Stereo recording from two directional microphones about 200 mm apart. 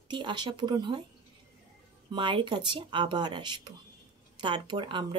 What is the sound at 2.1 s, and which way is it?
Speech, 25° right (ahead or behind).